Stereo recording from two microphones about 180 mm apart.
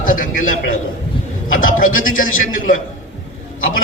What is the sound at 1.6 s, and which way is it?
Speech, 50° left (ahead or behind).